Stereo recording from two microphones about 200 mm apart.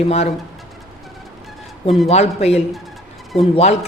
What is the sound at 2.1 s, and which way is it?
Speech, 30° left (ahead or behind).